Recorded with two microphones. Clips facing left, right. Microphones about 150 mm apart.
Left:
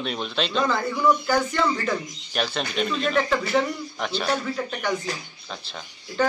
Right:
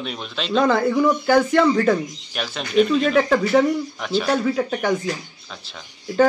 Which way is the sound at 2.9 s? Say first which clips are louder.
Right 6 dB; 45° right (ahead or behind).